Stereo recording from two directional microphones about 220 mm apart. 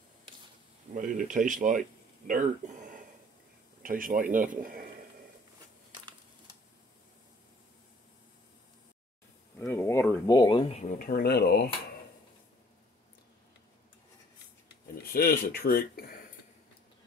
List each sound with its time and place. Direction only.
0.9 s speech: 35° right (ahead or behind)
9.6 s a sound: 10° left (ahead or behind)
10.9 s speech: 40° left (ahead or behind)
15.1 s speech: 45° left (ahead or behind)